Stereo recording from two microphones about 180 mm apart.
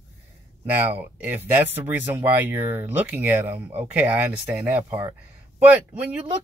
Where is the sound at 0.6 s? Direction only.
10° right (ahead or behind).